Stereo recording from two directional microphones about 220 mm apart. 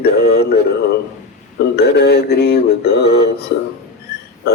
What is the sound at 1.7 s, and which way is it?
Music, 50° left (ahead or behind).